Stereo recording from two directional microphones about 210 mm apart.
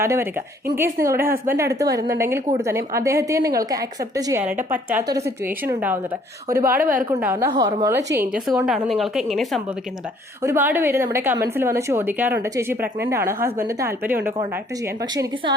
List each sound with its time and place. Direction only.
0.0 s a woman's voice: 10° right (ahead or behind)
6.5 s a woman's voice: 45° right (ahead or behind)
7.1 s a woman's voice: 10° right (ahead or behind)
8.6 s a woman's voice: centre (ahead or behind)
10.4 s a woman's voice: 10° right (ahead or behind)